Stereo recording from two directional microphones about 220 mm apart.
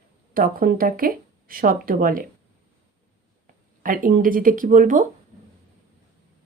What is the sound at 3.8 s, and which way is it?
Speech, 40° right (ahead or behind).